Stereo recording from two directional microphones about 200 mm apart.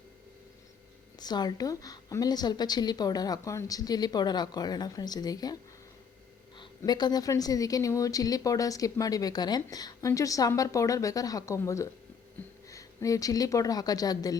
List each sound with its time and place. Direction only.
1.2 s a woman's voice: 20° left (ahead or behind)
6.6 s a woman's voice: 20° left (ahead or behind)